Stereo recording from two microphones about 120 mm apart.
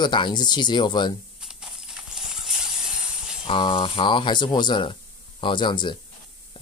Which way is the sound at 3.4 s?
45° left (ahead or behind).